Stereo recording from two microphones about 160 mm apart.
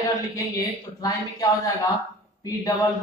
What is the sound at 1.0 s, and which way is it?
Speech, 25° left (ahead or behind).